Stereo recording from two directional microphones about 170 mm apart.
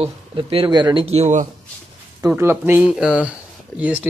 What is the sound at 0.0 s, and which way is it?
Speech, 30° right (ahead or behind).